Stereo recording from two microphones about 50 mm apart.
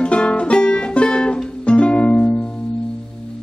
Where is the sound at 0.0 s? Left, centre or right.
Left.